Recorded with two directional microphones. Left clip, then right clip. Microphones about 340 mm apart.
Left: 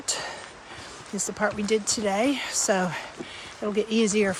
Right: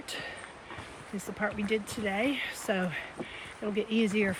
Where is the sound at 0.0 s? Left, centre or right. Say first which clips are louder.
Left 7 dB; centre.